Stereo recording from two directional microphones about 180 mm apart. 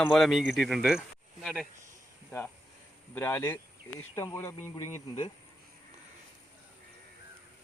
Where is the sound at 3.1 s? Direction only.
10° left (ahead or behind).